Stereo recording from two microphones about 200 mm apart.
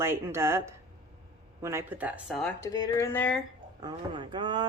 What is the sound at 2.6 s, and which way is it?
Speech, 15° left (ahead or behind).